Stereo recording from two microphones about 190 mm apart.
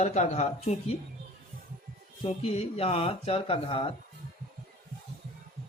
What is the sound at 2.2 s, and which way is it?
Speech, 30° left (ahead or behind).